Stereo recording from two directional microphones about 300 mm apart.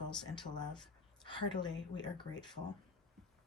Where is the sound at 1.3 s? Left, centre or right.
Centre.